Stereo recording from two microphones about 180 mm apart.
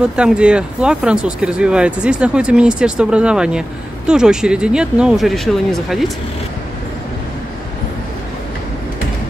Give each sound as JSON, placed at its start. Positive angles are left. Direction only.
{"t": 0.0, "sound": "speech", "side_deg": -5}